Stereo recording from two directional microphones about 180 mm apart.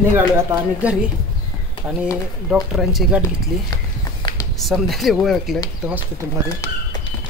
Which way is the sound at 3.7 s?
25° left (ahead or behind).